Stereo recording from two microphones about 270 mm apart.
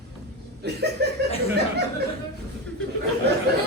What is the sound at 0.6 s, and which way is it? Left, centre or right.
Chuckle, right.